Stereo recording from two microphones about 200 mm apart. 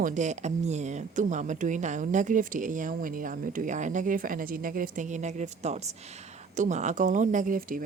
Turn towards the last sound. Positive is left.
turn(degrees=-45)  # may be behind; listen again after turning